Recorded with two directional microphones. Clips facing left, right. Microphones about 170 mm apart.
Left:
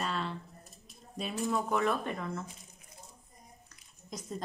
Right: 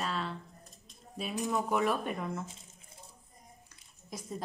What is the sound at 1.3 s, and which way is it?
A woman's voice, 15° right (ahead or behind).